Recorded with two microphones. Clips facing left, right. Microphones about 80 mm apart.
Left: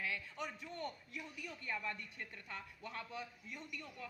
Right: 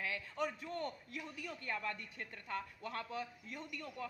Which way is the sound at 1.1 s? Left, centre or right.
Right.